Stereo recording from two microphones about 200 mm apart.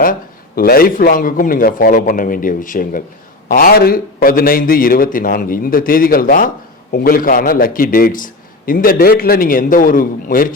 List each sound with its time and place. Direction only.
0.0 s a man's voice: 45° left (ahead or behind)